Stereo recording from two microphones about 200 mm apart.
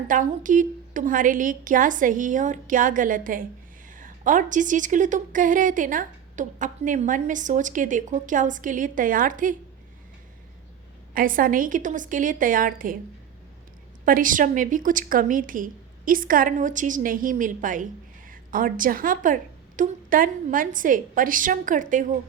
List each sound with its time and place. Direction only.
0.1 s a woman's voice: 40° right (ahead or behind)
11.1 s a woman's voice: 45° right (ahead or behind)
14.0 s a woman's voice: 45° right (ahead or behind)